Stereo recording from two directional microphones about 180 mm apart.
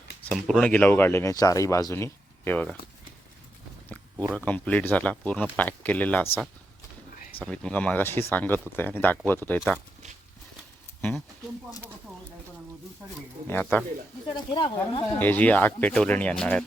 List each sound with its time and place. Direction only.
0.3 s speech: 5° left (ahead or behind)
3.8 s speech: 10° left (ahead or behind)
7.3 s speech: 5° left (ahead or behind)
13.5 s speech: 10° left (ahead or behind)
14.3 s speech: 30° left (ahead or behind)
15.2 s speech: 10° left (ahead or behind)